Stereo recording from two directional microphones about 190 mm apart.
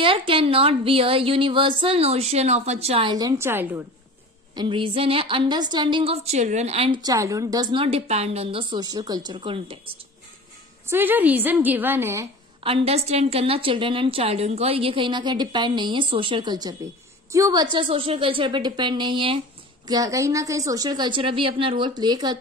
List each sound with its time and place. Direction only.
0.0 s a woman's voice: 25° right (ahead or behind)
4.6 s a woman's voice: 25° right (ahead or behind)
10.9 s a woman's voice: 10° right (ahead or behind)
12.6 s a woman's voice: 30° right (ahead or behind)